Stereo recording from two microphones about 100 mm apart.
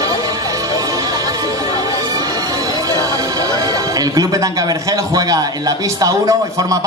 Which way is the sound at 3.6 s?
40° right (ahead or behind).